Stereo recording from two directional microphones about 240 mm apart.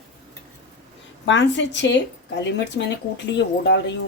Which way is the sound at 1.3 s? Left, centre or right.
Left.